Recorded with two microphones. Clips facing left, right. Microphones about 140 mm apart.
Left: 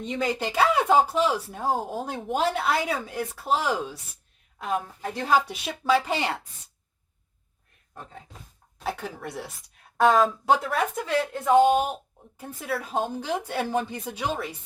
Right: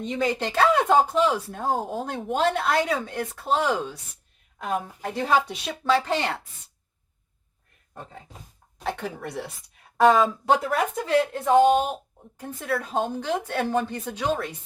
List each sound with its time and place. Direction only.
0.0 s a woman's voice: centre (ahead or behind)
8.8 s speech: 5° left (ahead or behind)